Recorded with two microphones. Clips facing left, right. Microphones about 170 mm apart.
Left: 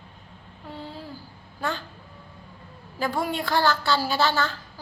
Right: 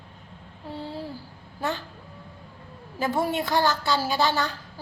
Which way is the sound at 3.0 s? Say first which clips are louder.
Right 2 dB; 25° right (ahead or behind).